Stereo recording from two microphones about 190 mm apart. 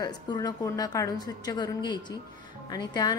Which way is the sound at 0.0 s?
20° left (ahead or behind).